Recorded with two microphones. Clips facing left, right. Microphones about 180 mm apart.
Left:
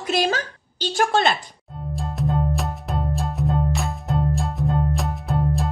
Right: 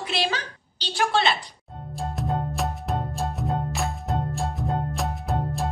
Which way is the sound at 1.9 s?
Centre (ahead or behind).